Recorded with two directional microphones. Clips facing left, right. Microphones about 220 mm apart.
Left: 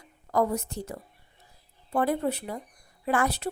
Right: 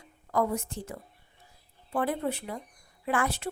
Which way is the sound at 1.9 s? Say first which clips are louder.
Left 3 dB; 40° left (ahead or behind).